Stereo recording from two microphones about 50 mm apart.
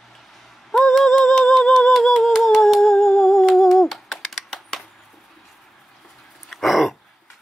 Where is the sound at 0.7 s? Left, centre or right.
Centre.